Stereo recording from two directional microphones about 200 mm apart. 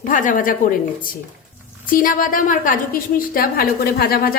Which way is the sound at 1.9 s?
45° left (ahead or behind).